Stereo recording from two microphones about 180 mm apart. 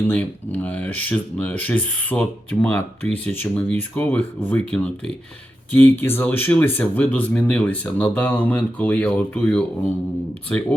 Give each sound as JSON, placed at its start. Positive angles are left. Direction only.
{"t": 0.1, "sound": "speech", "side_deg": 10}